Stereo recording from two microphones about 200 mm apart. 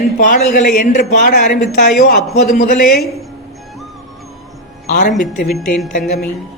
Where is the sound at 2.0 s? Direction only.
50° left (ahead or behind).